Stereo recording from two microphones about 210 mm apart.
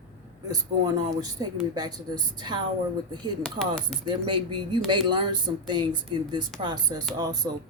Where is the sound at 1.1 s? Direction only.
15° right (ahead or behind).